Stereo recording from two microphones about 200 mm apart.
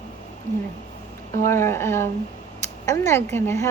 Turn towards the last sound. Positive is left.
turn(degrees=10)  # may be behind; listen again after turning